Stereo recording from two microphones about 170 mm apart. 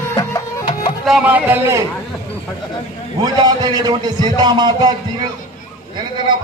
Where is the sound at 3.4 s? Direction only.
25° right (ahead or behind).